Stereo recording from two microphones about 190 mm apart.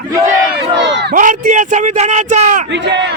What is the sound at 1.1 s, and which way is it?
Speech, 45° right (ahead or behind).